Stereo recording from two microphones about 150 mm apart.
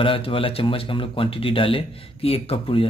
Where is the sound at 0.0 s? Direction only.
35° left (ahead or behind).